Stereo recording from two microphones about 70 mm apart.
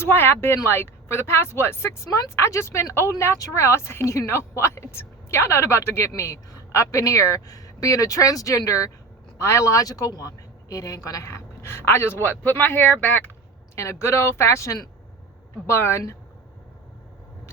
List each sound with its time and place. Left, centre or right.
0.0 s a woman's voice: left
13.7 s a woman's voice: left